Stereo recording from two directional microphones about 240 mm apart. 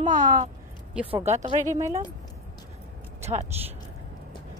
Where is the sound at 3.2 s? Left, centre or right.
Right.